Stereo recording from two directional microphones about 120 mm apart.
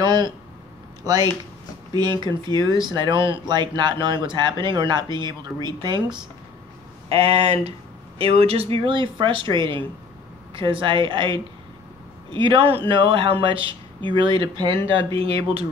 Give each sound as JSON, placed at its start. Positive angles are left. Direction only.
{"t": 0.0, "sound": "speech", "side_deg": -40}
{"t": 7.1, "sound": "speech", "side_deg": -55}